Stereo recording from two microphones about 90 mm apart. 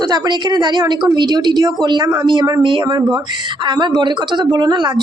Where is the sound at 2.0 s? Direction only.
35° right (ahead or behind).